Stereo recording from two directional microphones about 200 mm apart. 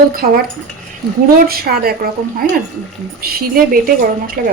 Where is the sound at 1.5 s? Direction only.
50° right (ahead or behind).